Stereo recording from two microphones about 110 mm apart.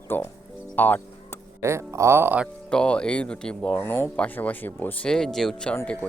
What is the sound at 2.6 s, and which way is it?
Speech, 10° left (ahead or behind).